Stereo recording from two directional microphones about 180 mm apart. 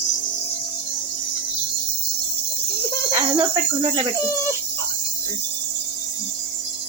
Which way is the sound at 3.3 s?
25° right (ahead or behind).